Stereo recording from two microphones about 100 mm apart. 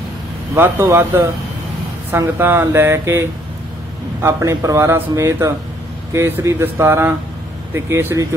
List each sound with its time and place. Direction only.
0.6 s a man's voice: 25° right (ahead or behind)